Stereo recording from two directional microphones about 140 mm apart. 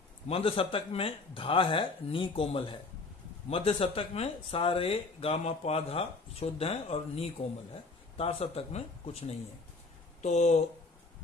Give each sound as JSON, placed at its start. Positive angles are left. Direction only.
{"t": 0.3, "sound": "speech", "side_deg": 40}